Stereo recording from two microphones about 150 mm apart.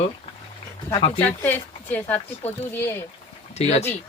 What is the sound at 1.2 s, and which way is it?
Speech, 10° left (ahead or behind).